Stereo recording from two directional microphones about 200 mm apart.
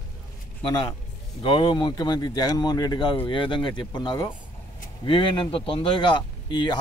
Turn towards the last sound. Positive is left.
turn(degrees=20)  # may be behind; listen again after turning